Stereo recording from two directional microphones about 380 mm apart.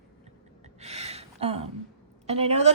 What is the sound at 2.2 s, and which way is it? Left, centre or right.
Speech, centre.